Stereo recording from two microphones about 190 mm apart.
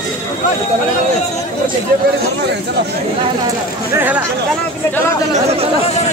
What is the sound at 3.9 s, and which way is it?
Speech, 10° right (ahead or behind).